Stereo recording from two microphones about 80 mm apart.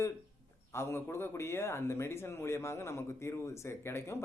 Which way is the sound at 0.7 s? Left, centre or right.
Left.